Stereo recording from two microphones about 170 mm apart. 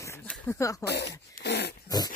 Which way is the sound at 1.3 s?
75° left (ahead or behind).